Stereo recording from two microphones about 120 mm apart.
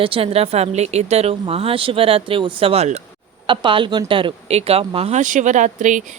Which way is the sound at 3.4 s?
45° right (ahead or behind).